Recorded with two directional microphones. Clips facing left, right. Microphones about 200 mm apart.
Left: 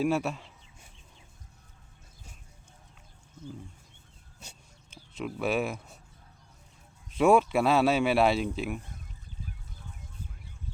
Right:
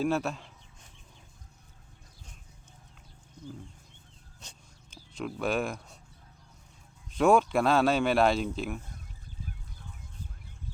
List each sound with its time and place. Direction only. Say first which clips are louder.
0.0 s a sound: left 1 dB; 10° left (ahead or behind)
4.4 s speech: left 2 dB; 5° left (ahead or behind)
7.1 s speech: left 1 dB; 5° left (ahead or behind)